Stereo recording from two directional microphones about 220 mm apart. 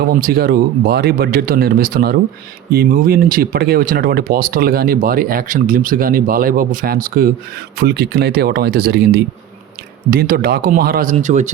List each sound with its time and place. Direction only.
0.1 s speech: 45° right (ahead or behind)